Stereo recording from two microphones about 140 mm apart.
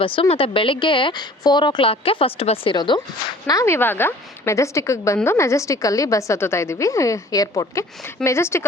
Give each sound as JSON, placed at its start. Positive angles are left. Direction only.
{"t": 0.0, "sound": "a woman's voice", "side_deg": 40}